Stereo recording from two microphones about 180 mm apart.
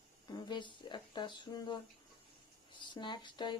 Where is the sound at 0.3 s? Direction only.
25° left (ahead or behind).